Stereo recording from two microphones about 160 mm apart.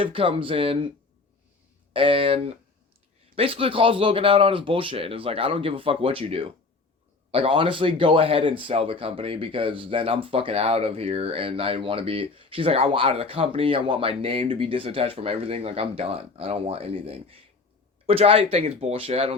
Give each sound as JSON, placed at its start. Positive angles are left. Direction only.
{"t": 0.0, "sound": "speech", "side_deg": -35}
{"t": 1.9, "sound": "speech", "side_deg": -35}